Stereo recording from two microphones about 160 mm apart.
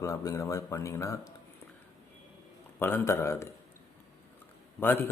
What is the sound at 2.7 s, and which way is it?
Speech, 15° left (ahead or behind).